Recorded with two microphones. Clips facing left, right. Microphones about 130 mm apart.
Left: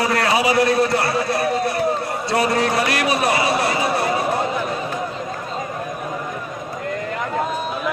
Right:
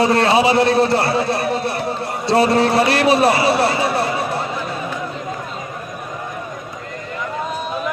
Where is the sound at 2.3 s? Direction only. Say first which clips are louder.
Right 5 dB; 30° right (ahead or behind).